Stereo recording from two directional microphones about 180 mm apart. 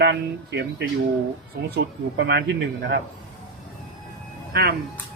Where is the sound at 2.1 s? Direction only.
70° right (ahead or behind).